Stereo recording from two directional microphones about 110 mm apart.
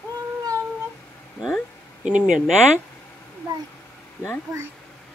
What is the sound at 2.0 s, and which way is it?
Speech, 10° right (ahead or behind).